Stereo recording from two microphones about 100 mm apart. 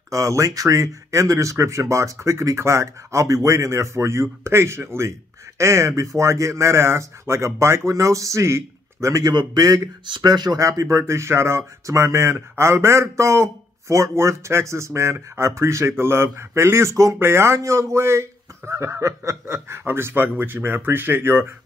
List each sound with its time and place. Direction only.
0.1 s speech: 30° right (ahead or behind)
9.3 s speech: 45° right (ahead or behind); by 21.5 s 25° right (ahead or behind)